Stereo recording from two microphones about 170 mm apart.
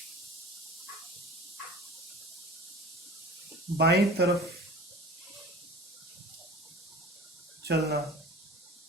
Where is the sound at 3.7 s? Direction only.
75° right (ahead or behind).